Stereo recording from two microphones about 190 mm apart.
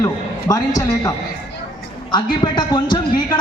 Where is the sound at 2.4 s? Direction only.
25° left (ahead or behind).